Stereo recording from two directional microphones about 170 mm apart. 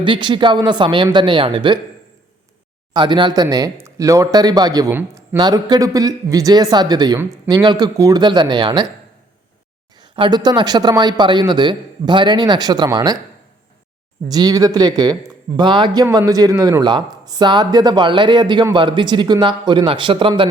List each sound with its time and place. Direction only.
0.0 s speech: 30° right (ahead or behind)
2.9 s speech: 25° right (ahead or behind)
5.4 s speech: 25° right (ahead or behind)
10.0 s speech: 25° right (ahead or behind)
14.3 s speech: 25° right (ahead or behind)